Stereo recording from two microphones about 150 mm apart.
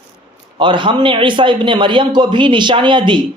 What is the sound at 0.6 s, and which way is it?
A man's voice, 35° right (ahead or behind).